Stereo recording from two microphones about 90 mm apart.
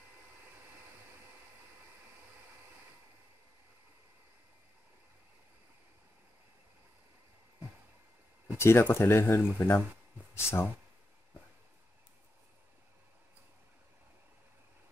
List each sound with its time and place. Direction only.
8.5 s speech: 30° left (ahead or behind)